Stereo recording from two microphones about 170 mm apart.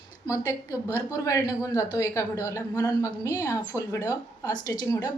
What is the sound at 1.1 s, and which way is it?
A woman's voice, 20° left (ahead or behind).